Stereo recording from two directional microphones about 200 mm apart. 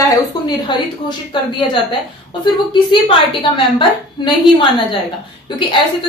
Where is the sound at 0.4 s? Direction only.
20° left (ahead or behind).